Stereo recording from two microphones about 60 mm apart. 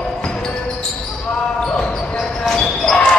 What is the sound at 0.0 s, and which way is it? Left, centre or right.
Basketball bounce, centre.